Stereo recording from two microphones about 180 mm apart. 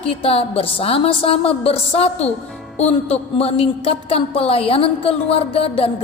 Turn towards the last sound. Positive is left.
turn(degrees=30)  # may be behind; listen again after turning